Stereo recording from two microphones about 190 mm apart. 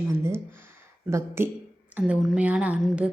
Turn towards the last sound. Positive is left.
turn(degrees=-5)  # may be behind; listen again after turning